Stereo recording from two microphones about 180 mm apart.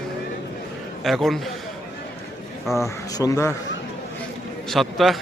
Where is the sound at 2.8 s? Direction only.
20° left (ahead or behind).